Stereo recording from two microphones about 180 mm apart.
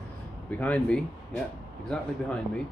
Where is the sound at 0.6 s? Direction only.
5° left (ahead or behind).